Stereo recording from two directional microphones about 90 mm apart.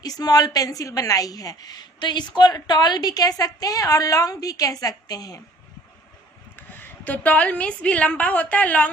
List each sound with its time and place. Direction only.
0.0 s a woman's voice: 45° left (ahead or behind)
6.7 s a woman's voice: 20° left (ahead or behind)